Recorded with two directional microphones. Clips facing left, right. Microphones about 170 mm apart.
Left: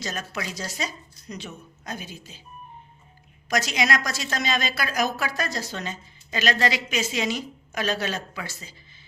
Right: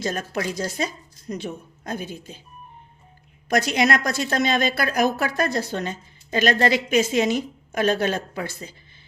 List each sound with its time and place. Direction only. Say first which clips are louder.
0.0 s speech: right 6 dB; 50° right (ahead or behind)
3.5 s a woman's voice: right 4 dB; 55° right (ahead or behind)